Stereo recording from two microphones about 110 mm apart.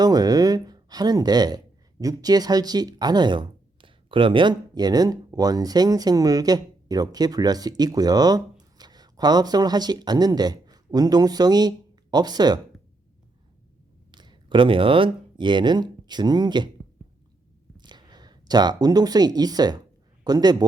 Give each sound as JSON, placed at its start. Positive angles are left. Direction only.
{"t": 0.0, "sound": "speech", "side_deg": -35}
{"t": 14.1, "sound": "speech", "side_deg": -45}
{"t": 17.7, "sound": "speech", "side_deg": -40}